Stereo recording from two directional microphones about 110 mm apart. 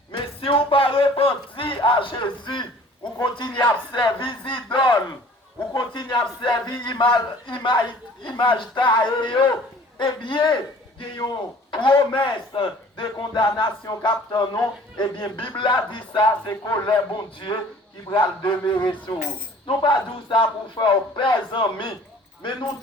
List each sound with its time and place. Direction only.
0.1 s a sound: 50° left (ahead or behind)
3.3 s a man's voice: 45° left (ahead or behind)
11.7 s a man's voice: 45° left (ahead or behind)